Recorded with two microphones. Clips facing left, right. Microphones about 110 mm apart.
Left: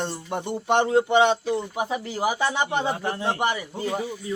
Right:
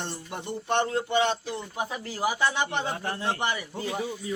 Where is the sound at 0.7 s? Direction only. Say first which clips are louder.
Left 6 dB; 90° left.